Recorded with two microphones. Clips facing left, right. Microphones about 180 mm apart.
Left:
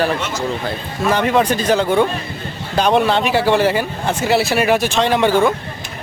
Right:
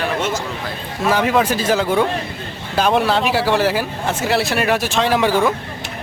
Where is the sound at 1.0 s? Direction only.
5° right (ahead or behind).